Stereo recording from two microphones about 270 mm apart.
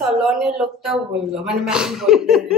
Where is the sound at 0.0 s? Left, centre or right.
Centre.